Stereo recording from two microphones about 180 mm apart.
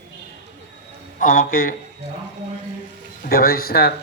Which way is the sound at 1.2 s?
50° left (ahead or behind).